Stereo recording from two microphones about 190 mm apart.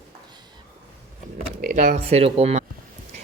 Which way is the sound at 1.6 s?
45° right (ahead or behind).